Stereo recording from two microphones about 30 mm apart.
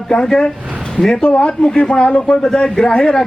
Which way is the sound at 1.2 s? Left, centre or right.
Left.